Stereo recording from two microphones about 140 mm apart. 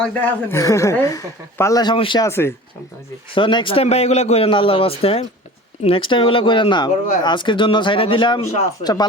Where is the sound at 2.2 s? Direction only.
20° left (ahead or behind).